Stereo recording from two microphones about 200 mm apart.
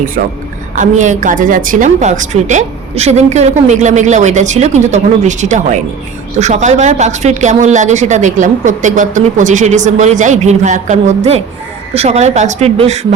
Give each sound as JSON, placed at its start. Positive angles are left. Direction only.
{"t": 0.8, "sound": "speech", "side_deg": -40}